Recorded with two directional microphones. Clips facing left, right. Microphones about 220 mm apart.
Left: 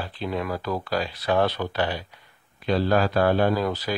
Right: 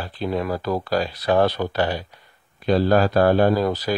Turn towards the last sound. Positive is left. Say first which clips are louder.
# right 4 dB
turn(degrees=-40)  # may be behind; listen again after turning